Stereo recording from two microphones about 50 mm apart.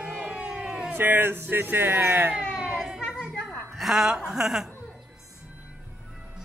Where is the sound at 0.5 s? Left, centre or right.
Centre.